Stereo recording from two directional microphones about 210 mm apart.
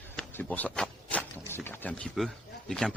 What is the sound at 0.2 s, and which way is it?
Speech, 10° left (ahead or behind).